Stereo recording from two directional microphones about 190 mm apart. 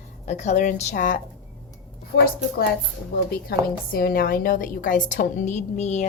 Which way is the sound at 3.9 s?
50° left (ahead or behind).